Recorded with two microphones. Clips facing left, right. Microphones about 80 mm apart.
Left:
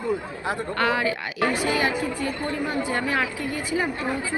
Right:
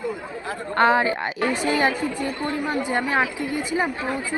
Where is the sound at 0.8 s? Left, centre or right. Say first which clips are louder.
Right 7 dB; right.